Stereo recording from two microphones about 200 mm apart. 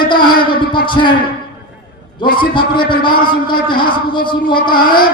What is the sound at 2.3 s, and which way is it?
A man's voice, 25° left (ahead or behind).